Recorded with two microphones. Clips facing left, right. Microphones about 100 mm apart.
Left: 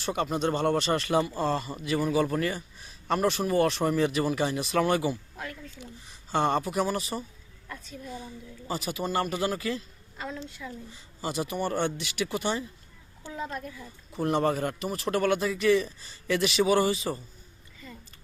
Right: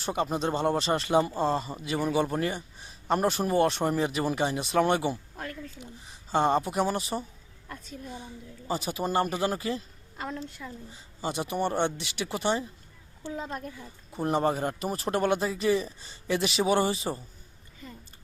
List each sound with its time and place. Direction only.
0.0 s speech: 30° right (ahead or behind)
6.3 s speech: 25° right (ahead or behind)
8.6 s speech: 30° right (ahead or behind)
10.2 s a woman's voice: 45° right (ahead or behind)
11.2 s speech: 25° right (ahead or behind)
13.6 s speech: 45° right (ahead or behind)
14.2 s speech: 25° right (ahead or behind)